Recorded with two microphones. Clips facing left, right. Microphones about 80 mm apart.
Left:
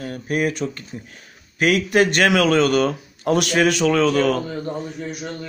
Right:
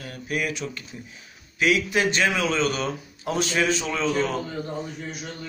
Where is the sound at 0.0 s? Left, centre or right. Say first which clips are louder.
Left 6 dB; left.